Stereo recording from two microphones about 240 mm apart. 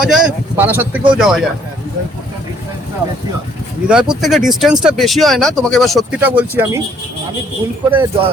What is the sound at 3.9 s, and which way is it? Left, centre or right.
Speech, centre.